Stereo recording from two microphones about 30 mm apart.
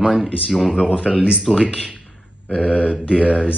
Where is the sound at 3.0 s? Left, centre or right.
Right.